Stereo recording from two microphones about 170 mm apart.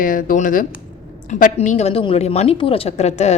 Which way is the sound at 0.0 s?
50° left (ahead or behind).